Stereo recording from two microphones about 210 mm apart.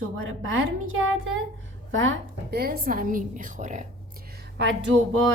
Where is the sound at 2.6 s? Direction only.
45° right (ahead or behind).